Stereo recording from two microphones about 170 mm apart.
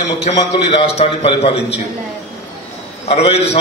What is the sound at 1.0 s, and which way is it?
Speech, 35° left (ahead or behind).